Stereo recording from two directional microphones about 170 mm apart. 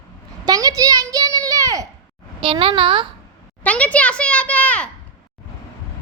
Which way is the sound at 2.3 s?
30° right (ahead or behind).